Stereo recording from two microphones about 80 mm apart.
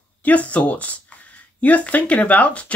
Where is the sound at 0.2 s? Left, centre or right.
Centre.